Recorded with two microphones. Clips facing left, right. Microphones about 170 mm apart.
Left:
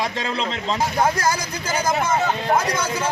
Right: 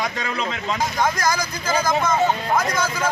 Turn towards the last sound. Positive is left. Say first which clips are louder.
# right 1 dB
turn(degrees=30)  # may be behind; listen again after turning